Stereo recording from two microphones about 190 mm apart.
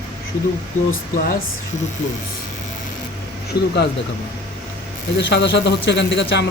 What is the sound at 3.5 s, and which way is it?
Speech, 60° left (ahead or behind).